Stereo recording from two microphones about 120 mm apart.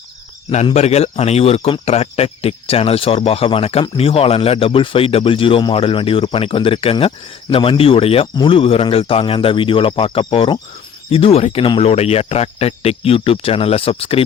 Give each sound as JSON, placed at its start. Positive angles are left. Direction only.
{"t": 0.5, "sound": "speech", "side_deg": 65}